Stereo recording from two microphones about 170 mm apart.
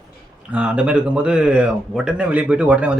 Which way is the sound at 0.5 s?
5° right (ahead or behind).